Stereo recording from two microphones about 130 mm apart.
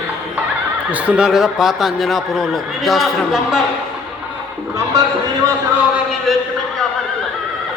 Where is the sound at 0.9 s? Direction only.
10° right (ahead or behind).